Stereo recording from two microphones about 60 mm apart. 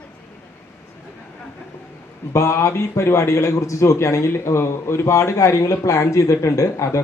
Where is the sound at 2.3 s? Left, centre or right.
Left.